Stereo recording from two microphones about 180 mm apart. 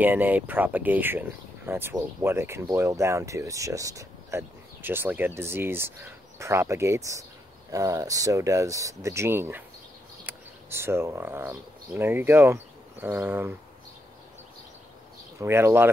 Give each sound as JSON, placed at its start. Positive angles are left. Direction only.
{"t": 0.0, "sound": "speech", "side_deg": -10}
{"t": 15.3, "sound": "speech", "side_deg": -15}